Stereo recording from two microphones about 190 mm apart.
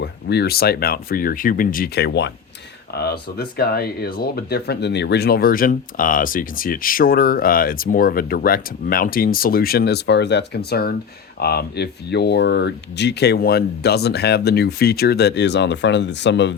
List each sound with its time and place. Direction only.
0.0 s speech: 60° left (ahead or behind)